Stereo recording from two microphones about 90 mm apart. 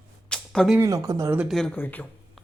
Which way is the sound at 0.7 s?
40° right (ahead or behind).